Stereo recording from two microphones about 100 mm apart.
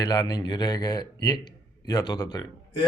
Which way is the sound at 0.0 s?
40° left (ahead or behind).